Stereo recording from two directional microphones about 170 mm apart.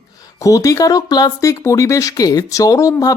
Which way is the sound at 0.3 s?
20° left (ahead or behind).